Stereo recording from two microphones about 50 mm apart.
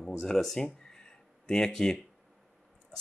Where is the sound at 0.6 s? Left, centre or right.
Centre.